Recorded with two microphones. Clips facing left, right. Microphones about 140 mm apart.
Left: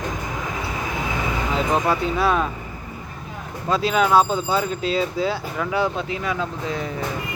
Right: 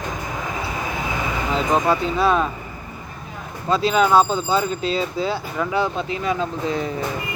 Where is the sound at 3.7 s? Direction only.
10° left (ahead or behind).